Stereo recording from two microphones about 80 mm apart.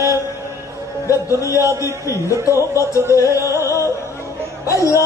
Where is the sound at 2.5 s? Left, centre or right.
Right.